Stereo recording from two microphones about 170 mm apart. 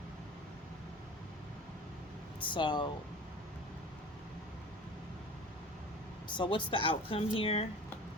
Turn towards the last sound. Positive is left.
turn(degrees=35)  # may be behind; listen again after turning